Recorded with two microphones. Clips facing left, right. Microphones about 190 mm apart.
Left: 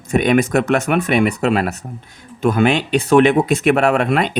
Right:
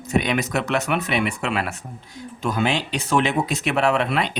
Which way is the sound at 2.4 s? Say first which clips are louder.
Left 8 dB; 60° left (ahead or behind).